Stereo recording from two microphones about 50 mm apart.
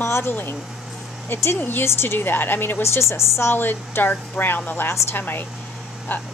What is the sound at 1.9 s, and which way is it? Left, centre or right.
Speech, left.